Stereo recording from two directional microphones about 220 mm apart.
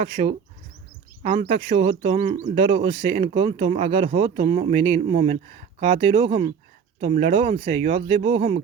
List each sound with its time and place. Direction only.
0.0 s speech: 25° right (ahead or behind)